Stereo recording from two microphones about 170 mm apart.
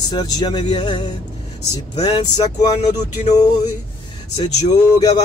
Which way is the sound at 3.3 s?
25° left (ahead or behind).